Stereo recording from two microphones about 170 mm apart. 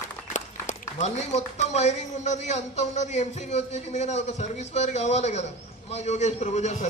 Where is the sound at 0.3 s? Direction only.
45° left (ahead or behind).